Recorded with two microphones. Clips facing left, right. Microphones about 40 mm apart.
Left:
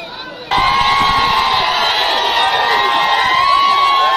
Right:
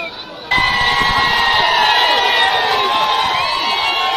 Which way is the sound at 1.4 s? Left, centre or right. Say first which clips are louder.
Even; right.